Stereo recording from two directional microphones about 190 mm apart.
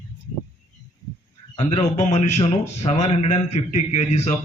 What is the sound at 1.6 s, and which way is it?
Mantra, 35° left (ahead or behind).